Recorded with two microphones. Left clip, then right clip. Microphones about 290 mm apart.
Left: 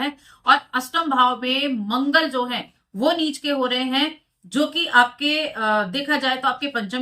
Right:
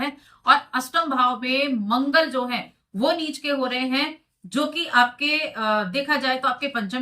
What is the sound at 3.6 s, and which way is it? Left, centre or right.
Speech, left.